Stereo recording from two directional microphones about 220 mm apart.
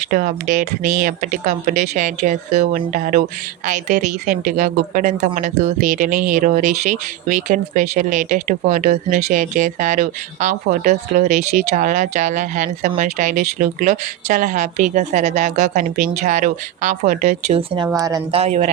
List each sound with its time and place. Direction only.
0.1 s a woman's voice: 35° right (ahead or behind)
17.8 s speech: 15° right (ahead or behind)